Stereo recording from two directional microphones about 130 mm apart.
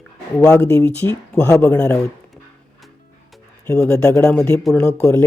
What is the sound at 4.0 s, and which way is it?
Speech, 25° left (ahead or behind).